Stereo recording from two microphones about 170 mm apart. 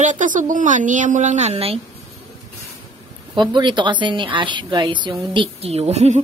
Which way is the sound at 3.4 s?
25° right (ahead or behind).